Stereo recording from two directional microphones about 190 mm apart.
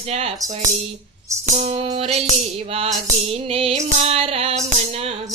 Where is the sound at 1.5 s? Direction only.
35° right (ahead or behind).